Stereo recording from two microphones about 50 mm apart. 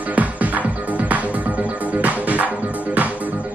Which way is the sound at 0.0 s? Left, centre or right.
Right.